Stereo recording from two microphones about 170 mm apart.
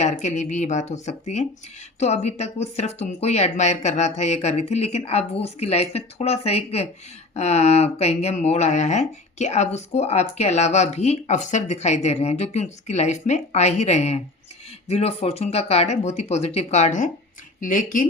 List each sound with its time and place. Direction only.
0.0 s speech: 45° left (ahead or behind)